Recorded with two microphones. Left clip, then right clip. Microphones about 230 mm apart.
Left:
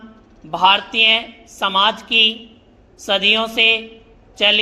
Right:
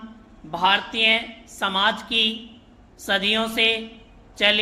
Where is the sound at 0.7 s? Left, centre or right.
Centre.